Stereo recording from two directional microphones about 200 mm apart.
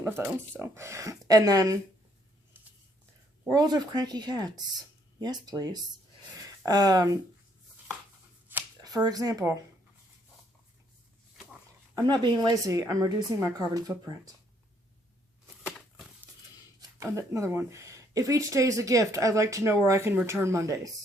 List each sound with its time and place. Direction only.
0.0 s a sound: 10° right (ahead or behind)
0.6 s speech: 15° right (ahead or behind)
3.4 s speech: 20° right (ahead or behind)
8.4 s finger snapping: 15° right (ahead or behind)
12.0 s speech: 20° right (ahead or behind)
17.0 s speech: 15° right (ahead or behind)